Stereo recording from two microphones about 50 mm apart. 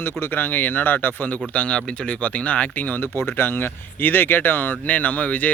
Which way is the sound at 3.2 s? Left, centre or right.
Left.